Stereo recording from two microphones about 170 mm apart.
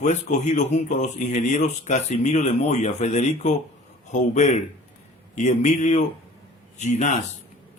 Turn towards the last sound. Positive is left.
turn(degrees=45)  # may be behind; listen again after turning